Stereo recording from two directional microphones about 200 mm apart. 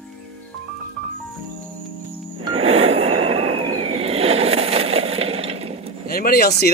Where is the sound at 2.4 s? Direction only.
25° right (ahead or behind).